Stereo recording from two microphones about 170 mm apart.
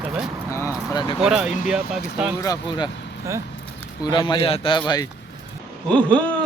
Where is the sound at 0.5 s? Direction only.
15° left (ahead or behind).